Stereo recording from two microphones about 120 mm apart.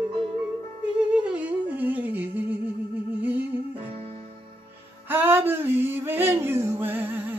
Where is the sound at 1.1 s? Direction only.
10° right (ahead or behind).